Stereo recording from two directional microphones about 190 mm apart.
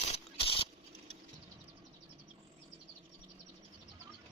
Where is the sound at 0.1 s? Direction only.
30° left (ahead or behind).